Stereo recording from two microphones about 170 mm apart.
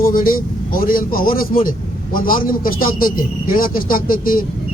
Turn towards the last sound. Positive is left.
turn(degrees=55)  # may be behind; listen again after turning